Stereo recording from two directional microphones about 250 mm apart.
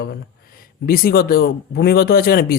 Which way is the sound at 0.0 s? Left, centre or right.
Left.